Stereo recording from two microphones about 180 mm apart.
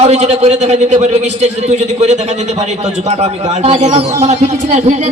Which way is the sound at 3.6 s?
40° right (ahead or behind).